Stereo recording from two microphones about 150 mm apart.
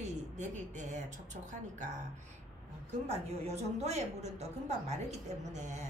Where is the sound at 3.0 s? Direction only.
45° right (ahead or behind).